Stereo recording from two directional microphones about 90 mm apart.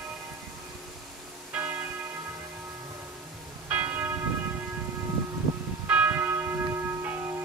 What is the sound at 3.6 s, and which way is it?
Church bell, 20° right (ahead or behind).